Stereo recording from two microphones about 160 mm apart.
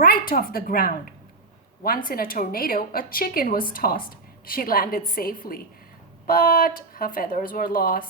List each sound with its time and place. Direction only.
0.0 s a woman's voice: 65° left (ahead or behind)